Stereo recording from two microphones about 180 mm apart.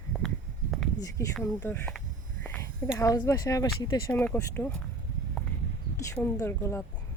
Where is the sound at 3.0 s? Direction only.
20° left (ahead or behind).